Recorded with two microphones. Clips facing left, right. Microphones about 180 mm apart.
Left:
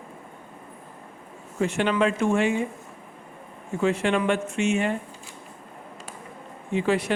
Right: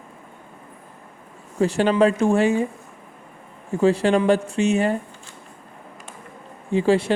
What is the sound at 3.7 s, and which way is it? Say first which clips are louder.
Speech: right 5 dB; 35° right (ahead or behind).